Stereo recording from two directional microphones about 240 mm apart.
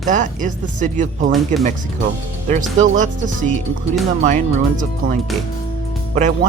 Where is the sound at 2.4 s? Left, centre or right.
Right.